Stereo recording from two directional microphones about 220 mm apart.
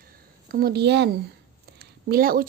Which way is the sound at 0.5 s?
45° right (ahead or behind).